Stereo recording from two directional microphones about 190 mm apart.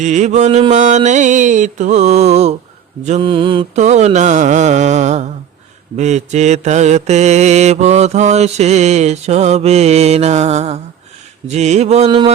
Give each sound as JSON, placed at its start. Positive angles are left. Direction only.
{"t": 0.0, "sound": "mantra", "side_deg": -40}